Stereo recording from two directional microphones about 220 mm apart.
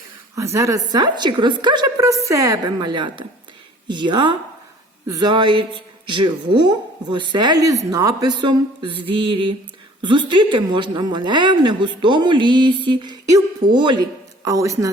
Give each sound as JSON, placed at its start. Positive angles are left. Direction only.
{"t": 0.3, "sound": "a woman's voice", "side_deg": -15}